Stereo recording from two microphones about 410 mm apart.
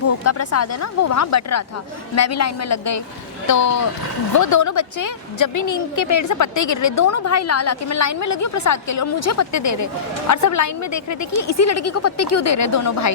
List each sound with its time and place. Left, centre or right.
0.3 s a woman's voice: left